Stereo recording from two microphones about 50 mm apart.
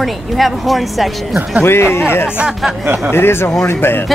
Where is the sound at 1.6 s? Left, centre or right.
Left.